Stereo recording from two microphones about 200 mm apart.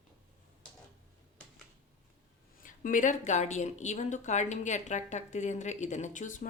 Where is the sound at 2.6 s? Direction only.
40° left (ahead or behind).